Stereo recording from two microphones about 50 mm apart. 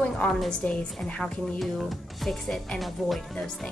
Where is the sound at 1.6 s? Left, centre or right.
Centre.